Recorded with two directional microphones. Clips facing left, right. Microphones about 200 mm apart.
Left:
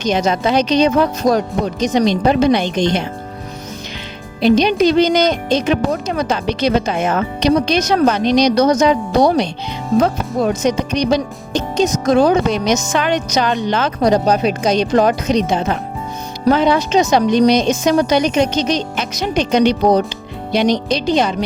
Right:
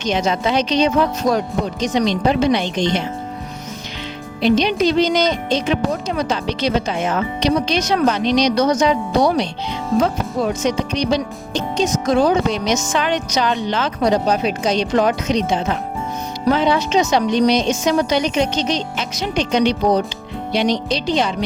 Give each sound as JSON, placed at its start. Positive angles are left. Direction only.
{"t": 0.1, "sound": "speech", "side_deg": 45}
{"t": 4.4, "sound": "speech", "side_deg": 40}